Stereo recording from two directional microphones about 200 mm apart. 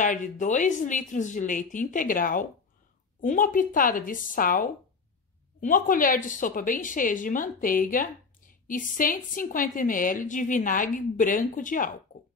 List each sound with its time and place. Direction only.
0.0 s a woman's voice: 40° left (ahead or behind)